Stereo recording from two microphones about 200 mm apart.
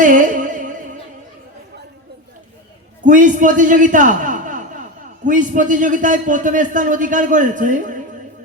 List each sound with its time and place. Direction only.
0.0 s music: 40° right (ahead or behind)
3.0 s a man's voice: 40° right (ahead or behind)